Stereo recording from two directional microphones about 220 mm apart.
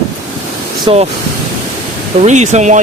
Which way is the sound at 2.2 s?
30° right (ahead or behind).